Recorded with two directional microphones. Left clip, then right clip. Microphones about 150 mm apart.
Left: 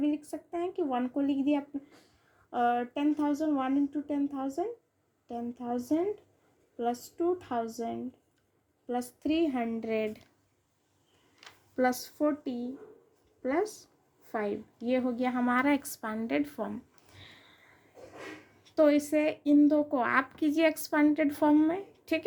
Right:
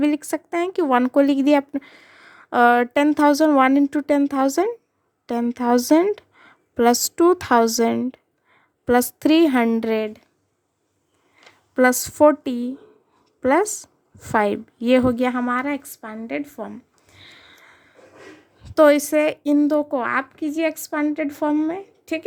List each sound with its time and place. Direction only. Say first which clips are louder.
0.0 s speech: right 11 dB; 70° right (ahead or behind)
2.5 s speech: right 13 dB; 90° right
8.9 s a woman's voice: right 15 dB; 70° right (ahead or behind)
11.7 s a woman's voice: right 12 dB; 55° right (ahead or behind)
15.2 s speech: right 9 dB; 35° right (ahead or behind)
15.4 s speech: right 4 dB; 15° right (ahead or behind); by 17.7 s 40° right (ahead or behind)
18.6 s a woman's voice: right 11 dB; 55° right (ahead or behind); by 22.2 s 20° right (ahead or behind)